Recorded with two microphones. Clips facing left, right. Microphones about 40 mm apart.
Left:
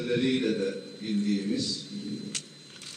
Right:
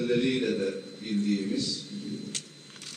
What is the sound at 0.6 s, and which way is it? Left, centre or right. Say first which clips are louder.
Speech: even; right.